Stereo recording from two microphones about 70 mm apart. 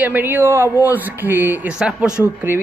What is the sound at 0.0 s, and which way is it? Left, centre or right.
Speech, right.